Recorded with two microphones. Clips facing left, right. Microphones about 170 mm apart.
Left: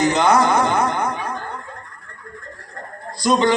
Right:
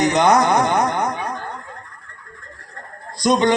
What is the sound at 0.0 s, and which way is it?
Music, 15° right (ahead or behind).